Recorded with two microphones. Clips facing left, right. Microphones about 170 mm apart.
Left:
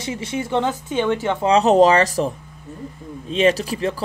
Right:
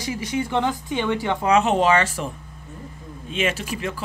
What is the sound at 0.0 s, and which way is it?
Speech, 25° left (ahead or behind).